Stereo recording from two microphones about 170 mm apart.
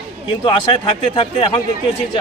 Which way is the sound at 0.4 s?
30° left (ahead or behind).